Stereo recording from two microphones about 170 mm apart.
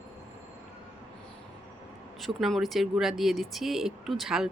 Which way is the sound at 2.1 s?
Centre (ahead or behind).